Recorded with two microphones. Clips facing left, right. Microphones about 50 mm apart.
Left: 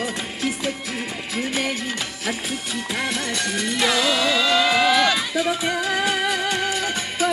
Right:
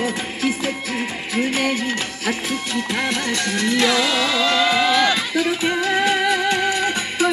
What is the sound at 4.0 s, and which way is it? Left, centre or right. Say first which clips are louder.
Music: right 1 dB; right.